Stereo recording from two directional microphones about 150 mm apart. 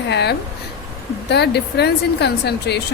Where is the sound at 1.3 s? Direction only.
90° left.